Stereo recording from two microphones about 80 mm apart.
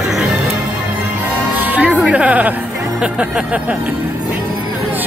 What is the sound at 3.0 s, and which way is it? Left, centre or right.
Speech, centre.